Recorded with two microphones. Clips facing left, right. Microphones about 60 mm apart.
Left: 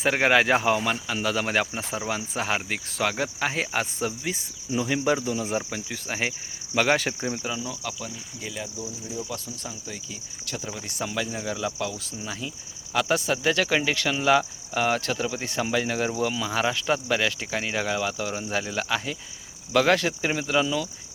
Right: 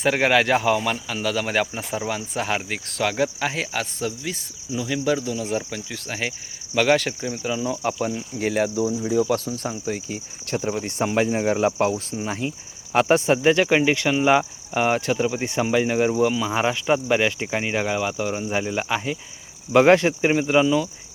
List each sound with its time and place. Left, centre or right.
0.0 s speech: centre
7.8 s speech: right
9.3 s speech: right; by 20.8 s centre